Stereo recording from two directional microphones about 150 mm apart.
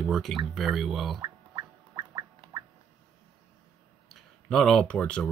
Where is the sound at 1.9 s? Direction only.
25° right (ahead or behind).